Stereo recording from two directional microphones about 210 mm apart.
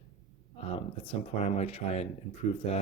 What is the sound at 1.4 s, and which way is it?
Speech, 30° left (ahead or behind).